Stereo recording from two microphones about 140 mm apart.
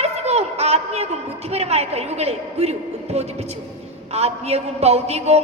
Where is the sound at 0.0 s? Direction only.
50° right (ahead or behind).